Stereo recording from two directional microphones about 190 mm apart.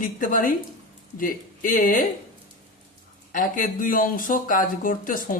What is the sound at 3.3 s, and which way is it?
Speech, 45° left (ahead or behind).